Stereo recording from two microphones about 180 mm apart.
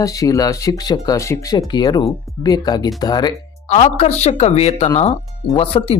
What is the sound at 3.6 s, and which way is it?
Speech, 40° left (ahead or behind).